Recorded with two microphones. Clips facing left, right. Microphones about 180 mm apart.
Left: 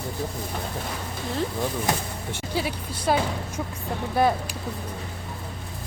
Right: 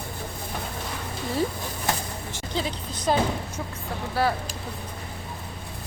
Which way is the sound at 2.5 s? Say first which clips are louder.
Left 1 dB; 10° left (ahead or behind).